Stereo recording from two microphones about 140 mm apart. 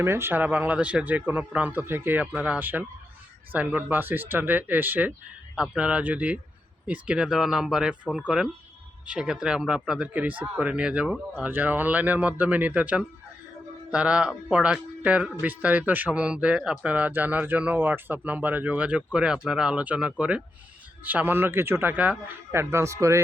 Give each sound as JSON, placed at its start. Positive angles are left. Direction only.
{"t": 0.0, "sound": "speech", "side_deg": -15}